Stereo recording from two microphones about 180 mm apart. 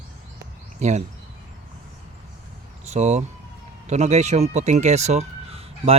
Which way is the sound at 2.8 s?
40° right (ahead or behind).